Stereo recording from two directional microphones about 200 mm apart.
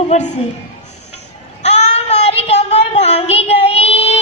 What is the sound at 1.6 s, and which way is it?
Child singing, 35° left (ahead or behind).